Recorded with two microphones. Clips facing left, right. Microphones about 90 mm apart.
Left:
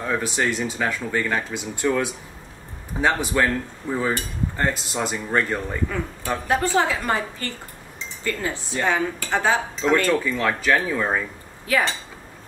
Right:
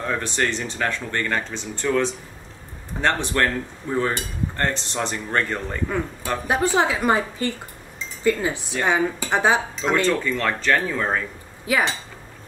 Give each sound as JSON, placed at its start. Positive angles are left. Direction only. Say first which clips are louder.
{"t": 0.0, "sound": "speech", "louder": "left 1 dB", "side_deg": 5}
{"t": 6.4, "sound": "a woman's voice", "louder": "right 1 dB", "side_deg": -20}
{"t": 10.0, "sound": "speech", "louder": "even", "side_deg": 5}
{"t": 11.6, "sound": "speech", "louder": "even", "side_deg": -15}